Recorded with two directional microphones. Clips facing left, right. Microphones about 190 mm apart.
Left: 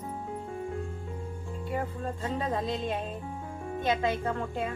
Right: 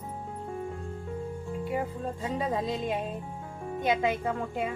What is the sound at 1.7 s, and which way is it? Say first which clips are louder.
Music: left 1 dB; 10° right (ahead or behind).